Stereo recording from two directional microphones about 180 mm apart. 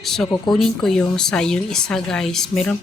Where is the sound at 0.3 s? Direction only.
25° left (ahead or behind).